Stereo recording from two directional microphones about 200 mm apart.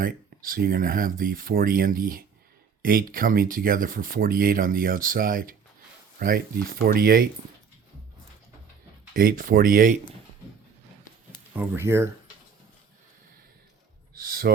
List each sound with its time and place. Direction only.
0.0 s speech: 45° right (ahead or behind)
9.1 s speech: 45° right (ahead or behind)
11.5 s speech: 10° right (ahead or behind)
14.1 s speech: 50° right (ahead or behind)